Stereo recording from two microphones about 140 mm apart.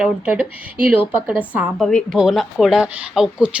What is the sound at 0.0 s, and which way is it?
Speech, 10° right (ahead or behind).